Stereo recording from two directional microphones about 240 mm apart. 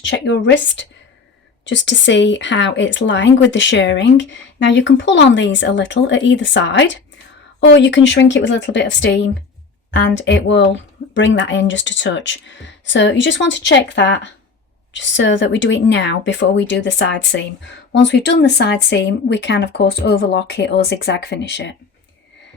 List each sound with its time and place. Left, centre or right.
0.0 s speech: left
11.0 s a sound: left
11.3 s speech: left